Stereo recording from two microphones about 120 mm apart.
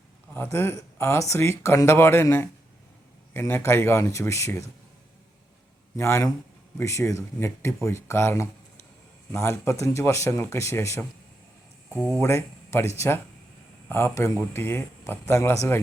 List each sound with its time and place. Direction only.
0.3 s speech: 20° left (ahead or behind)
6.0 s speech: 25° left (ahead or behind)
11.9 s speech: 5° right (ahead or behind)
12.2 s speech: 20° left (ahead or behind)